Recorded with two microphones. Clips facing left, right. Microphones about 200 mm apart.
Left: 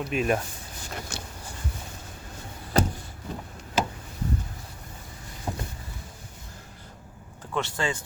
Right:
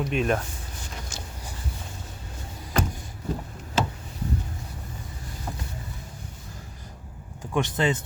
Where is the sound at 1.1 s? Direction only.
60° left (ahead or behind).